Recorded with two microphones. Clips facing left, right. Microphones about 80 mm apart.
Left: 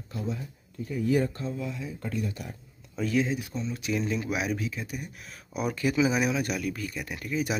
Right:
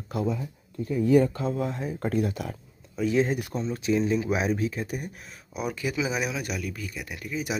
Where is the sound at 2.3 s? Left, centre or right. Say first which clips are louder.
Right 6 dB; right.